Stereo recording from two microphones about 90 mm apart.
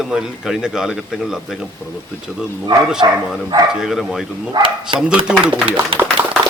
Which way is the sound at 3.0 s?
55° right (ahead or behind).